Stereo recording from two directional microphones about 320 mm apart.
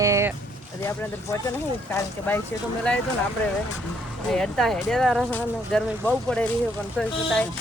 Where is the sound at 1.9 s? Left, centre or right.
Centre.